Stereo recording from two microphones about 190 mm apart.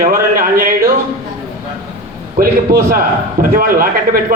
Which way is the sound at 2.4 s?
50° right (ahead or behind).